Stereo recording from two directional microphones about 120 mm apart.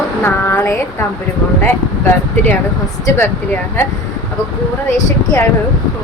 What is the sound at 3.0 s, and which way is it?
Speech, 20° left (ahead or behind).